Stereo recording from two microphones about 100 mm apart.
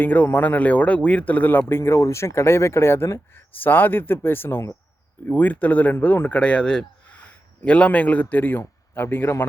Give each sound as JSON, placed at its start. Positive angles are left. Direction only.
{"t": 0.0, "sound": "speech", "side_deg": 20}
{"t": 5.2, "sound": "speech", "side_deg": 15}